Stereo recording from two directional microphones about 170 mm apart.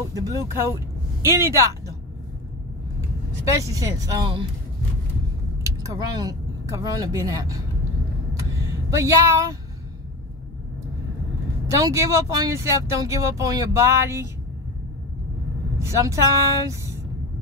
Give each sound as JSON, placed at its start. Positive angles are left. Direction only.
{"t": 0.1, "sound": "speech", "side_deg": -20}
{"t": 3.4, "sound": "speech", "side_deg": -20}
{"t": 5.9, "sound": "speech", "side_deg": -20}
{"t": 8.9, "sound": "speech", "side_deg": -15}
{"t": 11.7, "sound": "speech", "side_deg": -20}
{"t": 15.8, "sound": "speech", "side_deg": -20}